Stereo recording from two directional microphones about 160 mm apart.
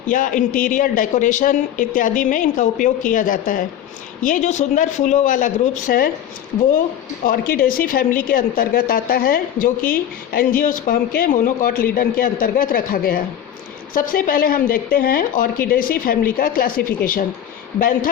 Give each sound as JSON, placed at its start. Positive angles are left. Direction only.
{"t": 0.1, "sound": "a woman's voice", "side_deg": 55}
{"t": 7.3, "sound": "a woman's voice", "side_deg": 65}